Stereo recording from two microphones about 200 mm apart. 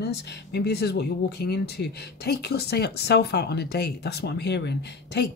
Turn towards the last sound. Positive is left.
turn(degrees=55)  # may be behind; listen again after turning